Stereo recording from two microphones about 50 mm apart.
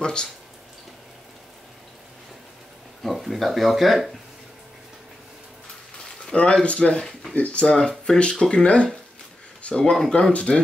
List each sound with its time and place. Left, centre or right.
0.0 s speech: centre
3.0 s speech: centre
6.6 s speech: left
9.6 s a sound: left
9.8 s speech: centre